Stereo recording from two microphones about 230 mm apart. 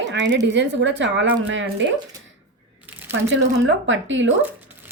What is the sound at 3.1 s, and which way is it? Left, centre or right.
A woman's voice, right.